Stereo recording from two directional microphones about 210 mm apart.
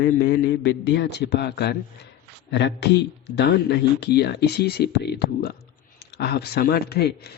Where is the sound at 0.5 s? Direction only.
65° left (ahead or behind).